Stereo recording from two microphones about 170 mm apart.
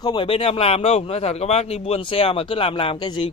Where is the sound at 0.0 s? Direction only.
30° left (ahead or behind).